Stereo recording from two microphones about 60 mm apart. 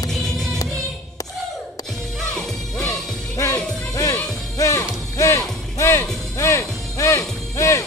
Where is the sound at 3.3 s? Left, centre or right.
Left.